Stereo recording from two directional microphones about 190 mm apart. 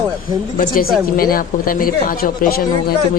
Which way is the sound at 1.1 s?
50° left (ahead or behind).